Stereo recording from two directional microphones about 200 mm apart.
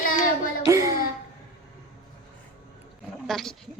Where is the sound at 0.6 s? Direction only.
15° right (ahead or behind).